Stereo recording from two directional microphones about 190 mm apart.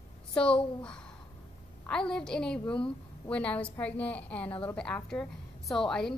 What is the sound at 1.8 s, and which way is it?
A woman's voice, 5° left (ahead or behind).